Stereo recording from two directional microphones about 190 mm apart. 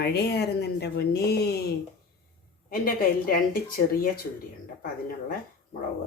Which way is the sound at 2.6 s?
50° left (ahead or behind).